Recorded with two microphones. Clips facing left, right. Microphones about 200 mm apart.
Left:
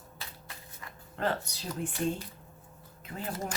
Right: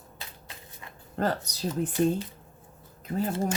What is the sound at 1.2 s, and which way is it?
Speech, 40° right (ahead or behind).